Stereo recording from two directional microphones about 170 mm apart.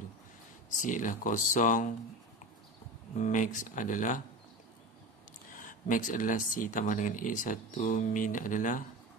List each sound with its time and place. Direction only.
0.7 s speech: 50° left (ahead or behind)
3.2 s speech: 50° left (ahead or behind)
5.6 s speech: 50° left (ahead or behind)